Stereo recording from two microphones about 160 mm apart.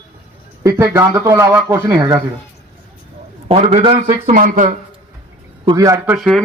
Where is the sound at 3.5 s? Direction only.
40° right (ahead or behind).